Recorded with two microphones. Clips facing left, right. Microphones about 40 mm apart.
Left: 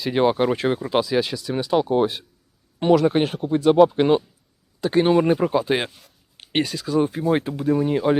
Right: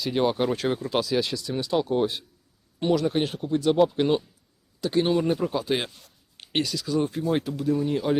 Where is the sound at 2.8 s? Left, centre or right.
Left.